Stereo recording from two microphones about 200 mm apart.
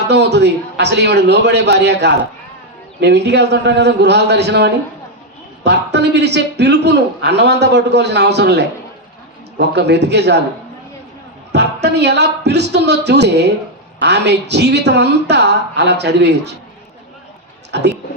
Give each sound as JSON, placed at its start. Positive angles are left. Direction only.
{"t": 0.1, "sound": "a man's voice", "side_deg": -55}
{"t": 11.5, "sound": "a man's voice", "side_deg": -55}
{"t": 17.7, "sound": "speech", "side_deg": -55}